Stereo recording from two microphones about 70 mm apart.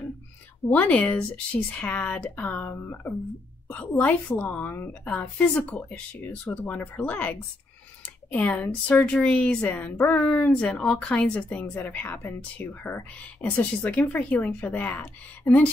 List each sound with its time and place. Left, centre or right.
0.7 s speech: left
3.6 s speech: left
10.1 s a woman's voice: centre